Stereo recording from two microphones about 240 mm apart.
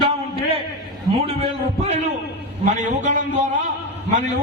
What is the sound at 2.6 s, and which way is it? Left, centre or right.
Speech, right.